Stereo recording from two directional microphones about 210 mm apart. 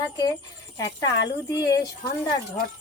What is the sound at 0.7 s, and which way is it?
Speech, 20° left (ahead or behind).